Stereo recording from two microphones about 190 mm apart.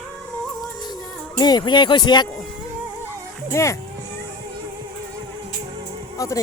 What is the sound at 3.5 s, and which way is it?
Speech, 15° left (ahead or behind).